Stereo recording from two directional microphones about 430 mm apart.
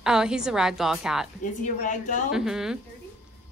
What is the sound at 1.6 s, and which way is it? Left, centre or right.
Speech, centre.